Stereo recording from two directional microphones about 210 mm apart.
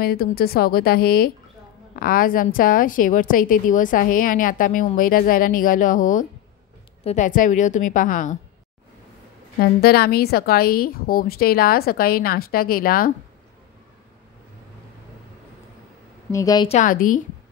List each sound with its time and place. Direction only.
0.0 s a woman's voice: 45° left (ahead or behind)
9.6 s a woman's voice: 50° left (ahead or behind)
16.3 s a woman's voice: 15° left (ahead or behind)
16.6 s a woman's voice: 35° left (ahead or behind)